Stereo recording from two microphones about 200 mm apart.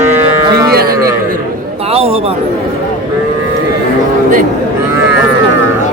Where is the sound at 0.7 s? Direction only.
50° right (ahead or behind).